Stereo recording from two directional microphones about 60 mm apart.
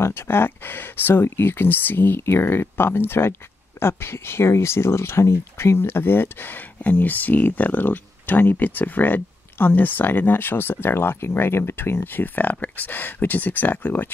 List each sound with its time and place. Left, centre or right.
0.0 s speech: left